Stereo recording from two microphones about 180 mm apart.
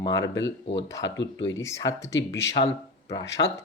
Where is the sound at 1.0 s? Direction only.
85° left.